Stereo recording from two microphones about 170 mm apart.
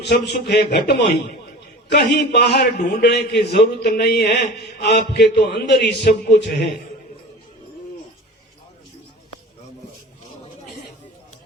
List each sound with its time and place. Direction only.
0.0 s a man's voice: 75° left (ahead or behind)